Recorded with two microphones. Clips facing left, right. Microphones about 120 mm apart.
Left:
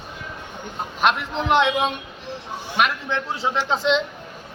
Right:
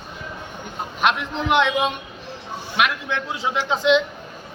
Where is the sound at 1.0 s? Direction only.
Centre (ahead or behind).